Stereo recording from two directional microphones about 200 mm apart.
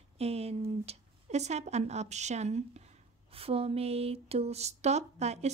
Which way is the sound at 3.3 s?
30° right (ahead or behind).